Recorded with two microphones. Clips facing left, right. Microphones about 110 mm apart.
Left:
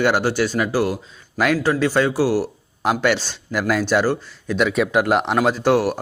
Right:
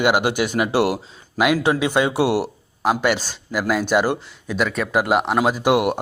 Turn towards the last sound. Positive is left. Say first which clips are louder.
# even
turn(degrees=-20)  # may be behind; listen again after turning